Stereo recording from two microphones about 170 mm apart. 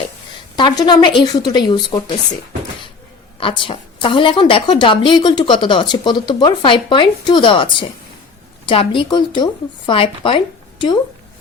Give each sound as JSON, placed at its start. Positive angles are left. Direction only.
{"t": 0.9, "sound": "a woman's voice", "side_deg": 25}
{"t": 3.4, "sound": "a woman's voice", "side_deg": 30}